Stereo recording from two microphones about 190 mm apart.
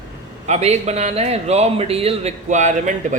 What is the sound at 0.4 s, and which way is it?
A man's voice, 35° right (ahead or behind).